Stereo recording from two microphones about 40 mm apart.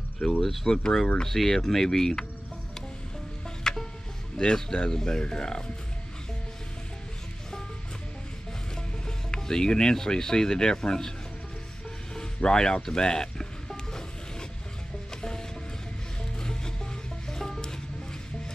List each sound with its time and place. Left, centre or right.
0.2 s speech: centre
0.7 s speech: centre
1.2 s speech: centre
3.4 s music: centre
4.4 s speech: centre
9.0 s speech: centre
12.4 s speech: centre
16.3 s music: centre